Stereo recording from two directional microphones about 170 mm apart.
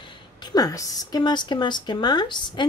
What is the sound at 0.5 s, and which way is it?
Speech, 20° left (ahead or behind).